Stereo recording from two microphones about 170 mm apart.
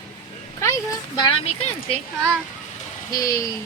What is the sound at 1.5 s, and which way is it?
Speech, 35° left (ahead or behind).